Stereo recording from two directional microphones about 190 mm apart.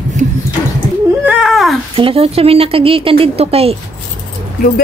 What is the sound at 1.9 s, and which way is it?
A woman's voice, 30° right (ahead or behind).